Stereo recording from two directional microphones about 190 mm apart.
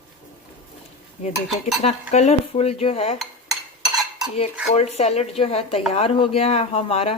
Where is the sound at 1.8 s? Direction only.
35° left (ahead or behind).